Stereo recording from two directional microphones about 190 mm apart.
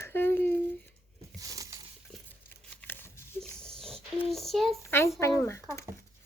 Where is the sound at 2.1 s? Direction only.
5° left (ahead or behind).